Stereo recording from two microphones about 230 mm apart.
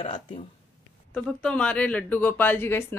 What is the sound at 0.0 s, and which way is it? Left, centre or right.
Speech, left.